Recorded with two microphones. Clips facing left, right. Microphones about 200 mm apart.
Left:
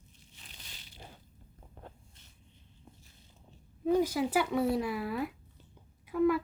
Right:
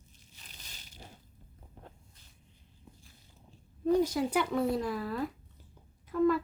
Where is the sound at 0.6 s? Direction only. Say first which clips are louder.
Right 1 dB; 45° right (ahead or behind).